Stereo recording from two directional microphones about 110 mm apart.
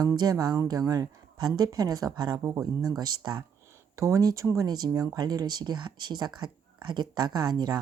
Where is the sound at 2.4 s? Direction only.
25° right (ahead or behind).